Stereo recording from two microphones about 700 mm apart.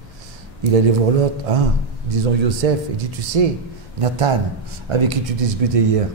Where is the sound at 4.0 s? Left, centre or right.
Right.